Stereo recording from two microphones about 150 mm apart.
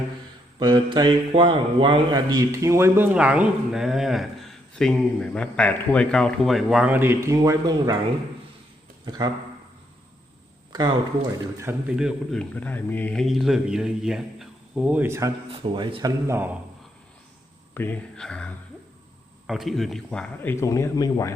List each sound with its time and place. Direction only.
0.6 s speech: 30° right (ahead or behind)
9.0 s speech: 30° right (ahead or behind)
10.7 s speech: 25° right (ahead or behind)
11.9 s speech: 5° right (ahead or behind)
12.4 s speech: 10° left (ahead or behind); by 15.3 s 15° right (ahead or behind)
15.4 s speech: 40° right (ahead or behind)
16.2 s speech: 15° right (ahead or behind)
17.7 s speech: 10° left (ahead or behind)